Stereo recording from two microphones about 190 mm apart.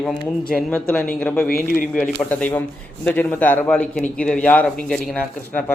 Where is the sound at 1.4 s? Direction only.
50° left (ahead or behind).